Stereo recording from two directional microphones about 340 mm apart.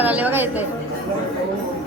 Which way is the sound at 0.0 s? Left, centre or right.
Centre.